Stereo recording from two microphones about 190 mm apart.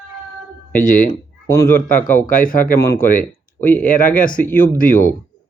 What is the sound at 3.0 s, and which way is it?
Speech, 45° left (ahead or behind).